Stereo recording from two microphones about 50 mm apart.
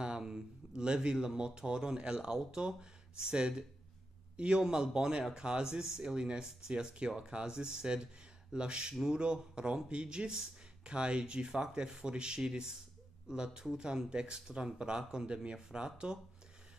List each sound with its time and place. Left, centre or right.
0.0 s speech: centre